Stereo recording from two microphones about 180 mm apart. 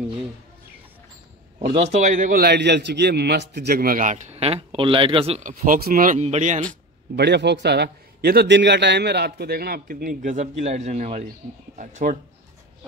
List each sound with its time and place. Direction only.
1.7 s a man's voice: 40° right (ahead or behind)
5.5 s a man's voice: 50° right (ahead or behind)
7.2 s a man's voice: 70° right (ahead or behind); by 12.2 s 45° right (ahead or behind)